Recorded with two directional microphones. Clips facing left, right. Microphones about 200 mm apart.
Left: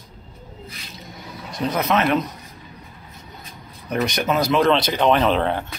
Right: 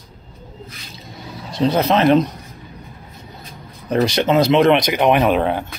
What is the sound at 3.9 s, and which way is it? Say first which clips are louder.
Speech: right 6 dB; 30° right (ahead or behind).